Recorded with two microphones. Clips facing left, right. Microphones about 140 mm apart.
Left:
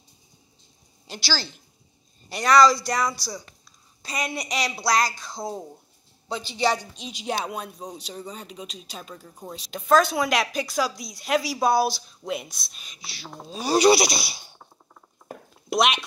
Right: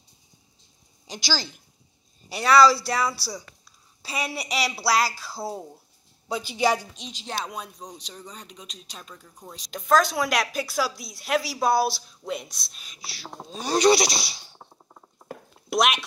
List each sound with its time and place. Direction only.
1.0 s a woman's voice: 15° right (ahead or behind)
7.0 s a woman's voice: 10° left (ahead or behind)
9.1 s speech: 25° left (ahead or behind)
9.5 s a woman's voice: 5° left (ahead or behind)
15.7 s speech: centre (ahead or behind)